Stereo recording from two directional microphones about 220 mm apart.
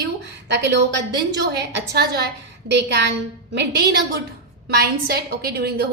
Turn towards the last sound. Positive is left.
turn(degrees=-45)  # may be behind; listen again after turning